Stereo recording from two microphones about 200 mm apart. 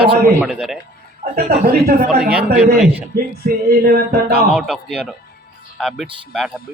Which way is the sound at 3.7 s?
45° right (ahead or behind).